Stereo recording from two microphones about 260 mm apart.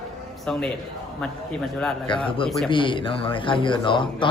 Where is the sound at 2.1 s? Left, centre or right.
Centre.